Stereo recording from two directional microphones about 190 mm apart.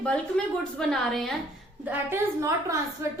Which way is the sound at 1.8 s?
10° right (ahead or behind).